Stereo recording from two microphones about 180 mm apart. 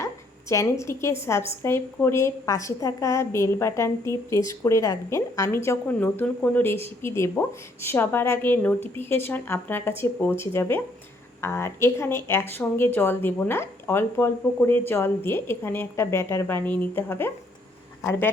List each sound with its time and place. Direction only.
0.0 s speech: 15° left (ahead or behind)